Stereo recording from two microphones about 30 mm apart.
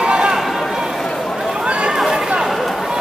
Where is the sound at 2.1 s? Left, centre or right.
Right.